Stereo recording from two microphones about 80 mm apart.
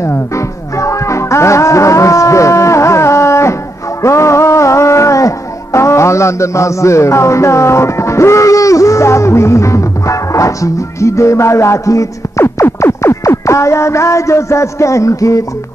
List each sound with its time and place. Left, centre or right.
0.7 s music: left